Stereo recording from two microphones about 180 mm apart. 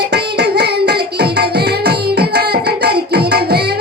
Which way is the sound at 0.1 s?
65° right (ahead or behind).